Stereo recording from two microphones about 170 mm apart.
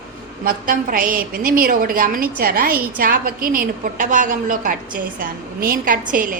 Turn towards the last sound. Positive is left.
turn(degrees=-50)  # may be behind; listen again after turning